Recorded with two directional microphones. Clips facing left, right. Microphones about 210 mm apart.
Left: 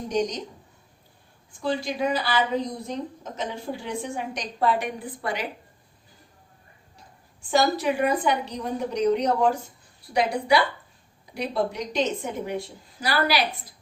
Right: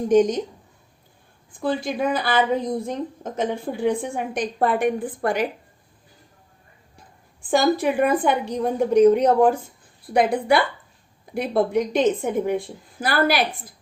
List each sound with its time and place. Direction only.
0.1 s a woman's voice: 50° right (ahead or behind)
1.5 s a woman's voice: 55° right (ahead or behind)
7.5 s a woman's voice: 55° right (ahead or behind)